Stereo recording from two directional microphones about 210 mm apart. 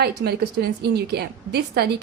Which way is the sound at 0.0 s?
50° right (ahead or behind).